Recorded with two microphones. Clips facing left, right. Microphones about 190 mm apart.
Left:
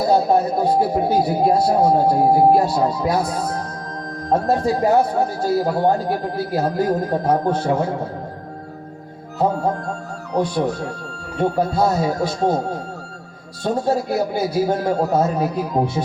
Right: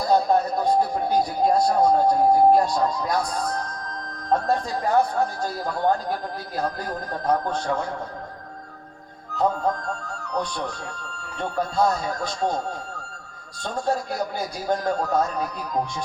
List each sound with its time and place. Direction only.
0.0 s speech: 5° left (ahead or behind)
9.3 s speech: 10° left (ahead or behind)
15.3 s speech: 25° left (ahead or behind)